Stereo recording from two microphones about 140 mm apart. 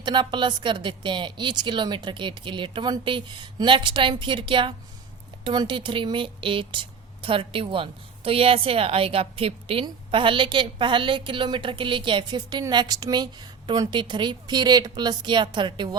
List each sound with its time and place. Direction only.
0.0 s a woman's voice: 35° right (ahead or behind)